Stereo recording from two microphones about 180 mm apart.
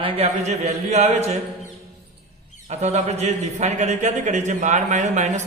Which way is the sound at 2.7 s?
40° right (ahead or behind).